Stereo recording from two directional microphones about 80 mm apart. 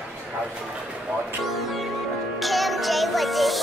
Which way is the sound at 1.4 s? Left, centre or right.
Centre.